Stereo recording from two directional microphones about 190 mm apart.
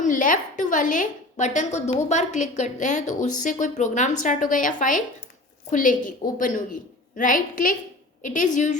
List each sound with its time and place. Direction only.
0.0 s a woman's voice: 45° left (ahead or behind)